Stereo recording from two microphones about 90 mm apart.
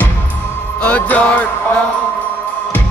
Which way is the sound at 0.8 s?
15° left (ahead or behind).